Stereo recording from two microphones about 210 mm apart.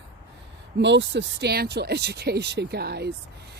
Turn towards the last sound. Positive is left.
turn(degrees=-50)  # may be behind; listen again after turning